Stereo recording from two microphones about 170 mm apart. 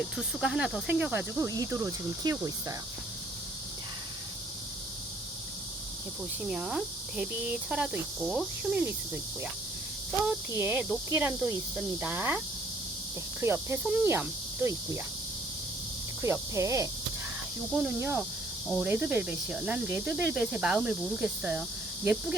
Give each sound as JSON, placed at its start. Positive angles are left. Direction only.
{"t": 0.2, "sound": "speech", "side_deg": 0}
{"t": 6.5, "sound": "speech", "side_deg": -5}
{"t": 10.5, "sound": "speech", "side_deg": -15}
{"t": 13.4, "sound": "speech", "side_deg": -15}
{"t": 16.2, "sound": "speech", "side_deg": -15}